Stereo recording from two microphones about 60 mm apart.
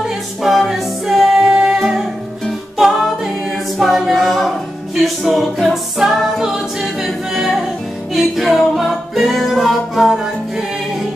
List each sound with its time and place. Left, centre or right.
0.0 s music: centre
2.8 s a capella: centre